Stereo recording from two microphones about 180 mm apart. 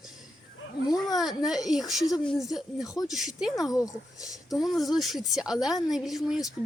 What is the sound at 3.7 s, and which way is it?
Speech, 20° left (ahead or behind).